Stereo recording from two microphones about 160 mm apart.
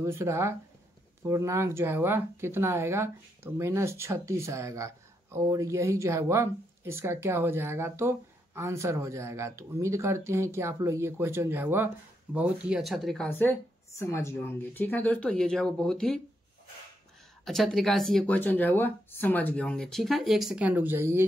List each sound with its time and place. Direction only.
0.0 s speech: 15° right (ahead or behind); by 13.3 s centre (ahead or behind)
13.3 s speech: 15° left (ahead or behind)
17.5 s speech: centre (ahead or behind); by 21.3 s 15° right (ahead or behind)